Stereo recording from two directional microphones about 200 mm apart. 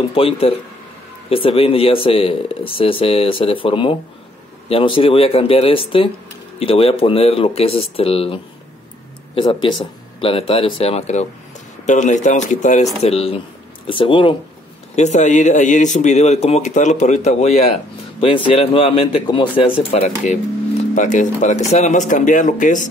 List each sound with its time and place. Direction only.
0.1 s speech: 30° left (ahead or behind)
15.0 s speech: 35° left (ahead or behind)